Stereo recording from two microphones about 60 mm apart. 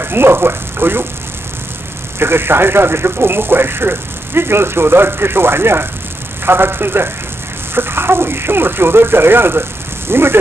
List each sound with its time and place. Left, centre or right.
0.0 s speech: right
2.1 s speech: right